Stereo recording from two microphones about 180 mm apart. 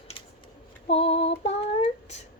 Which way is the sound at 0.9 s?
35° left (ahead or behind).